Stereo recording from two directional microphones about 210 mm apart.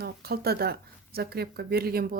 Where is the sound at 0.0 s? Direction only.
50° right (ahead or behind).